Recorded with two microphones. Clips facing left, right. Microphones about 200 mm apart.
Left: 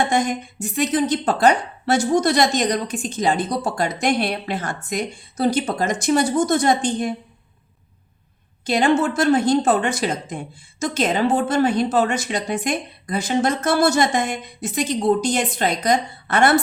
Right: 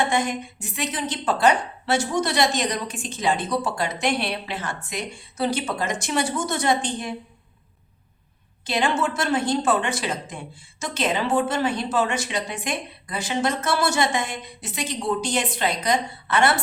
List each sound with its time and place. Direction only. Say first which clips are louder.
0.1 s a woman's voice: left 3 dB; 40° left (ahead or behind)
8.6 s a woman's voice: left 6 dB; 40° left (ahead or behind)